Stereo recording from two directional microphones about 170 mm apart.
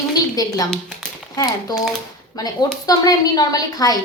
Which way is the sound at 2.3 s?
20° left (ahead or behind).